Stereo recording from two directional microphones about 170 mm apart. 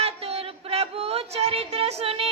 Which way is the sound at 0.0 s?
35° right (ahead or behind).